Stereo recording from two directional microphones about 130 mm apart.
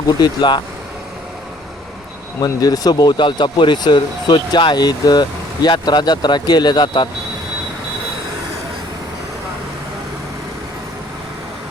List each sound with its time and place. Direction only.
0.2 s speech: 35° left (ahead or behind)
2.4 s speech: 30° left (ahead or behind)